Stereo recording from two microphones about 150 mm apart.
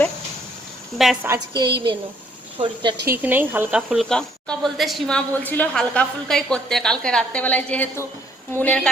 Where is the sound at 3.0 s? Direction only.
15° right (ahead or behind).